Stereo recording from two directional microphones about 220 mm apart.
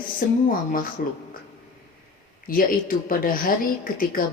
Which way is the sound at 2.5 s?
40° left (ahead or behind).